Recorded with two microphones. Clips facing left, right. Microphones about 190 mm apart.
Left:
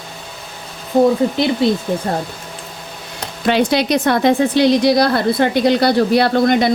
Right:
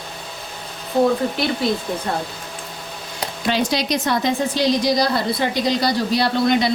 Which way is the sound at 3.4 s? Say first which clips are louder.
Left 6 dB; 60° left (ahead or behind).